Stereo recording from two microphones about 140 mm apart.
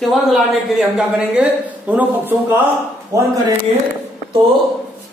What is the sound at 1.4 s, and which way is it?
Speech, 10° right (ahead or behind).